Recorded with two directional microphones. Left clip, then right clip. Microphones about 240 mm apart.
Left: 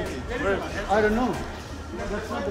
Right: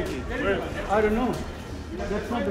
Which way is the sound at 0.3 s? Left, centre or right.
Left.